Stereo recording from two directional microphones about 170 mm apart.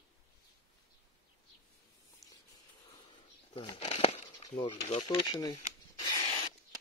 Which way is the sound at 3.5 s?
30° left (ahead or behind).